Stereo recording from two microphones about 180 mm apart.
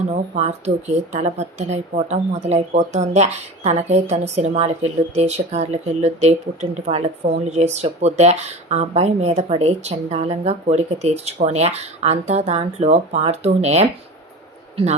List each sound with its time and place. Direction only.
0.3 s a woman's voice: 40° right (ahead or behind)